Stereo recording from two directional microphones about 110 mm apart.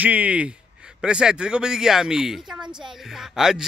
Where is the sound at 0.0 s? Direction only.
15° right (ahead or behind).